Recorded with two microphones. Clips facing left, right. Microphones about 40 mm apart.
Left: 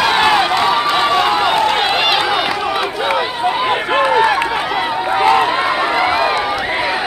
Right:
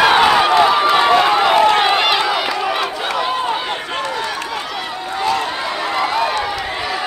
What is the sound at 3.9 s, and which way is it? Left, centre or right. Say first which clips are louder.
Run: left 12 dB; left.